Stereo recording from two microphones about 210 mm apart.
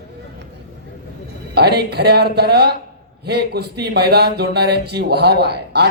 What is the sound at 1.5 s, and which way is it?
A man's voice, 50° right (ahead or behind).